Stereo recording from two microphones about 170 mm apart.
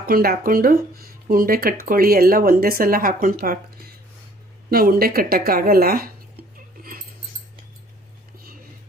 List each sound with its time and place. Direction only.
0.0 s speech: 60° right (ahead or behind)
4.7 s speech: 60° right (ahead or behind)